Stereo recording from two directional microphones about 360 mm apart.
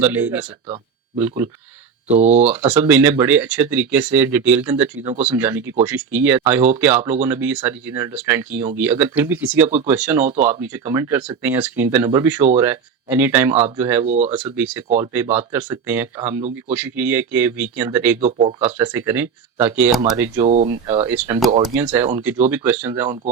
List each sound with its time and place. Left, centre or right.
0.0 s speech: centre
2.4 s speech: centre
5.4 s speech: centre
14.1 s speech: centre
14.3 s speech: centre
14.8 s speech: centre
15.1 s speech: centre
18.2 s speech: centre
20.4 s speech: centre
21.1 s speech: centre